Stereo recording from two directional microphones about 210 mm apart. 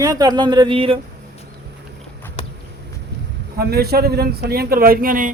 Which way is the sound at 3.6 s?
50° right (ahead or behind).